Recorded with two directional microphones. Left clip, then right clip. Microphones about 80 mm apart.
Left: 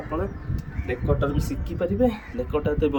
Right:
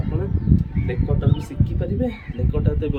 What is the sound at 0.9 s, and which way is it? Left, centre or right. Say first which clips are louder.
Speech: left 3 dB; right.